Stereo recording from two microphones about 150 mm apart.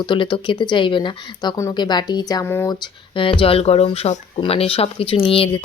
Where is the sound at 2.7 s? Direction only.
35° left (ahead or behind).